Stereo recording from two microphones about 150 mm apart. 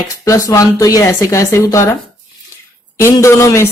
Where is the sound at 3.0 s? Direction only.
20° left (ahead or behind).